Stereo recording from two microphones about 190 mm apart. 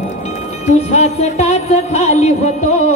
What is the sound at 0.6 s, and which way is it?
Music, 40° left (ahead or behind).